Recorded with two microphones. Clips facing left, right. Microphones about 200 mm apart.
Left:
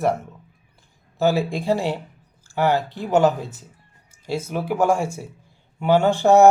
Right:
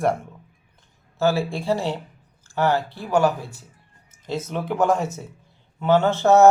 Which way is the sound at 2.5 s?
15° left (ahead or behind).